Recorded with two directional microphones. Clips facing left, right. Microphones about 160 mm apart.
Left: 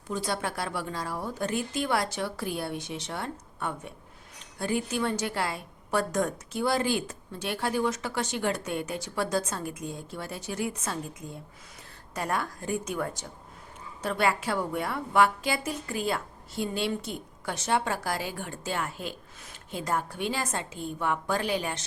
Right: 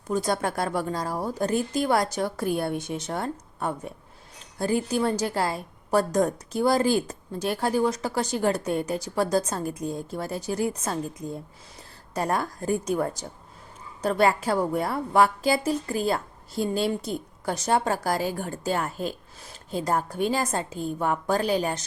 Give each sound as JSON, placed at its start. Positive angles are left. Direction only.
{"t": 0.1, "sound": "a woman's voice", "side_deg": -45}
{"t": 12.1, "sound": "a woman's voice", "side_deg": -35}